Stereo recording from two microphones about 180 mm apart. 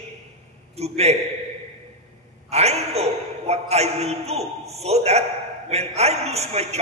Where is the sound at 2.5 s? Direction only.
35° right (ahead or behind).